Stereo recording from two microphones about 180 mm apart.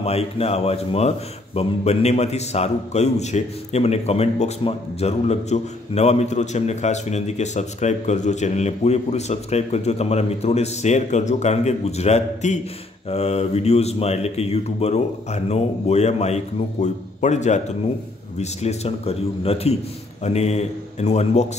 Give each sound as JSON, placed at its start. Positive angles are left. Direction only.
{"t": 0.0, "sound": "a man's voice", "side_deg": 35}